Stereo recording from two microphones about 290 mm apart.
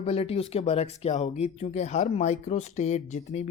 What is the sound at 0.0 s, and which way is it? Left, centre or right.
Speech, centre.